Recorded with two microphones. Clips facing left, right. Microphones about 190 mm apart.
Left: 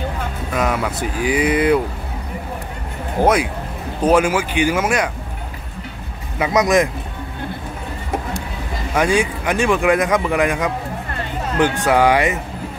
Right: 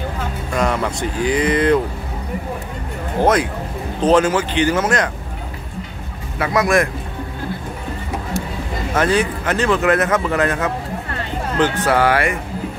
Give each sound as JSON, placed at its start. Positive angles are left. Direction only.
{"t": 0.5, "sound": "a man's voice", "side_deg": 5}
{"t": 3.2, "sound": "a man's voice", "side_deg": 10}
{"t": 6.3, "sound": "a man's voice", "side_deg": 20}
{"t": 8.9, "sound": "a man's voice", "side_deg": 10}